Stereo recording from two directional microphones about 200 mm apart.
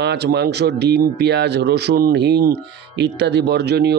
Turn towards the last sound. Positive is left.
turn(degrees=-55)  # may be behind; listen again after turning